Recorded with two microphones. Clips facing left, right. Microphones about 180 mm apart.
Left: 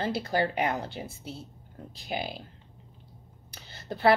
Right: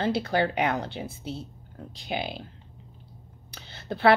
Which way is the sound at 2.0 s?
70° right (ahead or behind).